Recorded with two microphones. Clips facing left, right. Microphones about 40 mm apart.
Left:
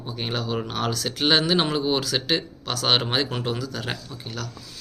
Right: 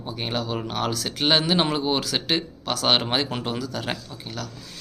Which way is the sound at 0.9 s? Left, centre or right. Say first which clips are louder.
Left 1 dB; centre.